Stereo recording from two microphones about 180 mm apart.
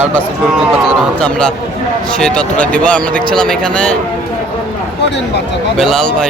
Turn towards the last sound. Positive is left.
turn(degrees=5)  # may be behind; listen again after turning